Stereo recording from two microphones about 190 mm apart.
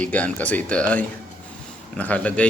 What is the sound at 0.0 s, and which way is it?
Speech, 5° left (ahead or behind).